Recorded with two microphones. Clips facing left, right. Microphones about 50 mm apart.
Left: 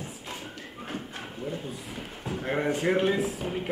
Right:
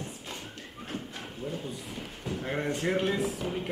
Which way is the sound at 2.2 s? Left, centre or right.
Centre.